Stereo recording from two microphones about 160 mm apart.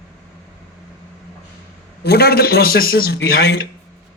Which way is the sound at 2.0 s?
80° left.